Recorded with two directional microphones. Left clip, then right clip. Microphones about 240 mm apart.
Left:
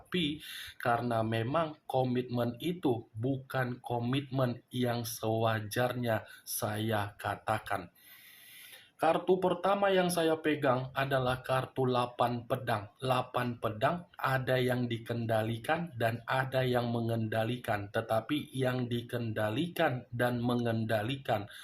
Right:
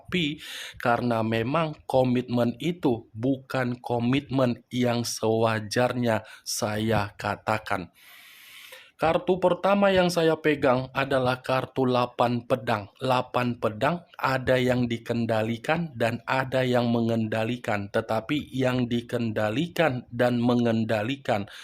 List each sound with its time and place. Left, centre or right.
0.1 s speech: right
9.0 s speech: right